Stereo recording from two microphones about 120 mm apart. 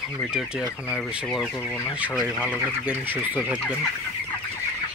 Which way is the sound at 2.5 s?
15° right (ahead or behind).